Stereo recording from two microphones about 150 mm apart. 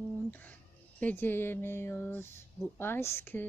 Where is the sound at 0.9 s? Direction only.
10° left (ahead or behind).